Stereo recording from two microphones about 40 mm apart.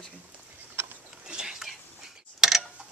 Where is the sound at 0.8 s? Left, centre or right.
Right.